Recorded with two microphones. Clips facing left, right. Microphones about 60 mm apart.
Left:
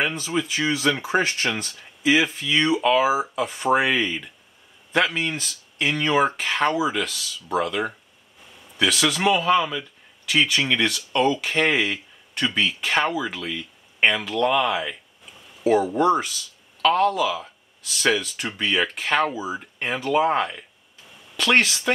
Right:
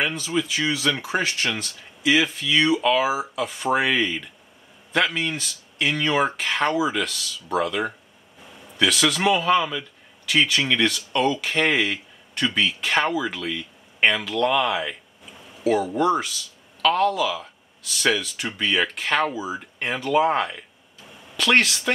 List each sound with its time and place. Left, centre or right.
0.0 s speech: centre
2.1 s speech: centre
2.7 s speech: centre